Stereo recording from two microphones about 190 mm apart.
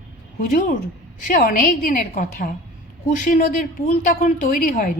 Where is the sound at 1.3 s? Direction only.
45° left (ahead or behind).